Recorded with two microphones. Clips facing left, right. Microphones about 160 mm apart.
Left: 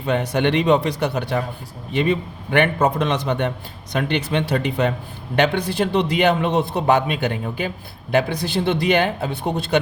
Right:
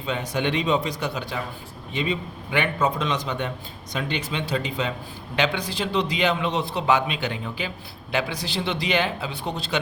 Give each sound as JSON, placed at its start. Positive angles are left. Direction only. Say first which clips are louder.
{"t": 0.0, "sound": "a man's voice", "louder": "left 6 dB", "side_deg": 60}